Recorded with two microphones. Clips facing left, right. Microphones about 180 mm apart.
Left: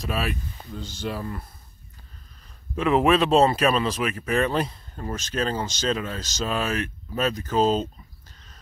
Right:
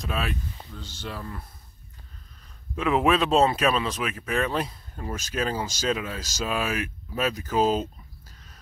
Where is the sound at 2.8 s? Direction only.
Centre (ahead or behind).